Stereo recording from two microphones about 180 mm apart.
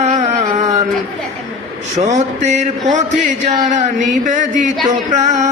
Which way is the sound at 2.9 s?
40° right (ahead or behind).